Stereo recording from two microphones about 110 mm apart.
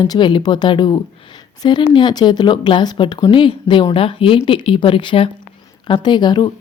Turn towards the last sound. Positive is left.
turn(degrees=45)  # may be behind; listen again after turning